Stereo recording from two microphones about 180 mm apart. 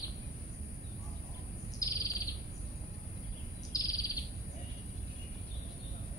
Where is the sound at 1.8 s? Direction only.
20° left (ahead or behind).